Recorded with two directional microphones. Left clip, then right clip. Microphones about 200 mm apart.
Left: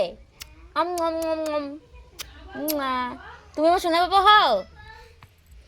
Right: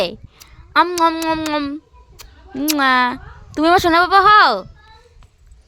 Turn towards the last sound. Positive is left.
turn(degrees=-30)  # may be behind; listen again after turning